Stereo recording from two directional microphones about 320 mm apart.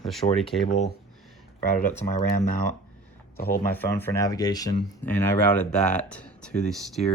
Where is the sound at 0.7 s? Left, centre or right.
Left.